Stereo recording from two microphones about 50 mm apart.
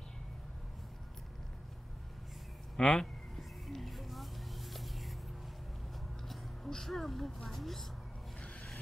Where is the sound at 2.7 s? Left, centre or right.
Centre.